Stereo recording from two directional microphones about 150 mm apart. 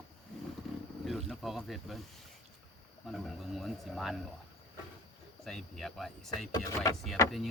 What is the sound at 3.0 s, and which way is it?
Speech, centre (ahead or behind).